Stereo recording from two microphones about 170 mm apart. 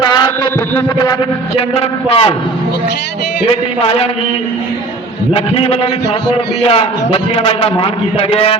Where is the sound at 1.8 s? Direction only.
35° left (ahead or behind).